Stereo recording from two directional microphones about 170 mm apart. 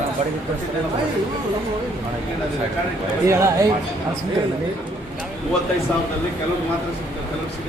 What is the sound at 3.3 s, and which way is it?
Speech, 15° right (ahead or behind).